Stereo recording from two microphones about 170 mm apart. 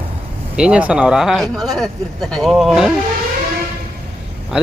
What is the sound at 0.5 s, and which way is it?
Speech, 5° right (ahead or behind).